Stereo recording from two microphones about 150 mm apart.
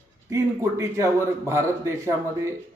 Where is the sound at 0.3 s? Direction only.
20° right (ahead or behind).